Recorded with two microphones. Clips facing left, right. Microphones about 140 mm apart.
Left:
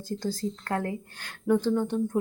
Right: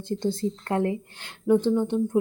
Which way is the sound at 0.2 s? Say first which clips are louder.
Right 4 dB; 25° right (ahead or behind).